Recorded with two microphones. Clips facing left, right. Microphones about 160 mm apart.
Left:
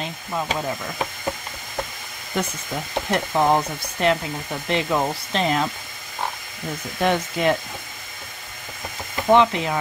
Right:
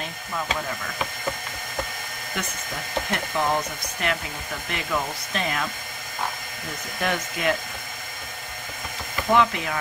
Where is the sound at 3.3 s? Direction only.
35° left (ahead or behind).